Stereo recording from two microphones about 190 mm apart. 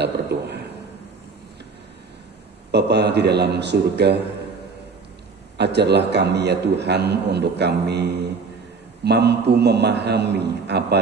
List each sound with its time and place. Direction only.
0.0 s a man's voice: 60° right (ahead or behind)
2.7 s a man's voice: 60° right (ahead or behind)
5.6 s a man's voice: 60° right (ahead or behind)